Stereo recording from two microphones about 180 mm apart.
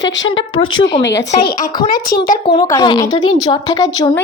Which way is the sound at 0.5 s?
30° left (ahead or behind).